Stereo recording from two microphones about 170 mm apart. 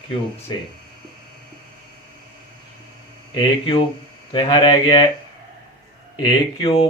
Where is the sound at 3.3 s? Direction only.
30° left (ahead or behind).